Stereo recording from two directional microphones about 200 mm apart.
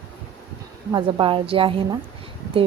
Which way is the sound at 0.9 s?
25° right (ahead or behind).